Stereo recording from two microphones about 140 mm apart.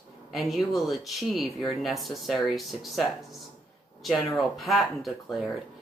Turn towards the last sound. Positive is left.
turn(degrees=0)  # may be behind; listen again after turning